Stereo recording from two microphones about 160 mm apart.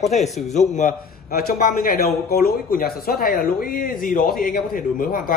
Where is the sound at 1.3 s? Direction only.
70° left (ahead or behind).